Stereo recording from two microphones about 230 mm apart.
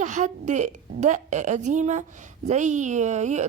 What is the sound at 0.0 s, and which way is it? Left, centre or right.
A woman's voice, right.